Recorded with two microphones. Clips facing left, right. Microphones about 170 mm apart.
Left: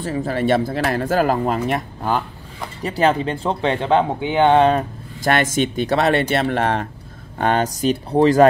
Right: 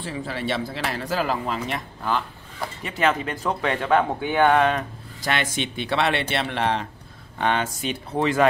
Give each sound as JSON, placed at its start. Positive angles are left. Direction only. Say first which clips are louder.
{"t": 0.0, "sound": "speech", "louder": "left 8 dB", "side_deg": 45}
{"t": 5.2, "sound": "speech", "louder": "left 8 dB", "side_deg": 45}